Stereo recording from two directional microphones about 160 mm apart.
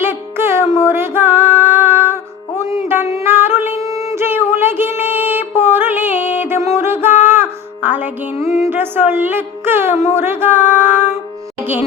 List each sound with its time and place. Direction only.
0.0 s music: 15° right (ahead or behind)
7.3 s a sound: 10° right (ahead or behind)
8.6 s a woman's voice: 15° right (ahead or behind)
9.9 s speech: 45° left (ahead or behind)
10.2 s a woman's voice: 15° right (ahead or behind)